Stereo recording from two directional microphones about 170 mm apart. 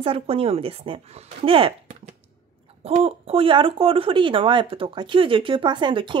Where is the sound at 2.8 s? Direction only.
35° right (ahead or behind).